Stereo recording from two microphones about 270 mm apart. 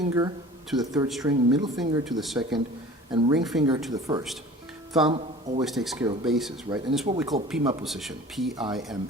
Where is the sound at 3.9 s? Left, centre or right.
Centre.